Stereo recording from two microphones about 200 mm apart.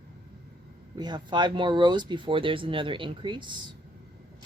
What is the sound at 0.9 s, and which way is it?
Speech, 20° right (ahead or behind).